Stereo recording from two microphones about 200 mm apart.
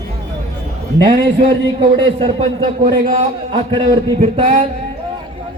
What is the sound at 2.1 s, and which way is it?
A man's voice, 25° right (ahead or behind).